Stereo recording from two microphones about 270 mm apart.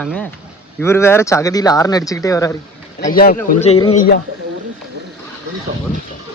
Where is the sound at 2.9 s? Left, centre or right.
Left.